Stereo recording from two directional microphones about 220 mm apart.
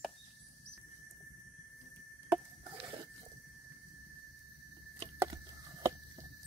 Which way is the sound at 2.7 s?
20° right (ahead or behind).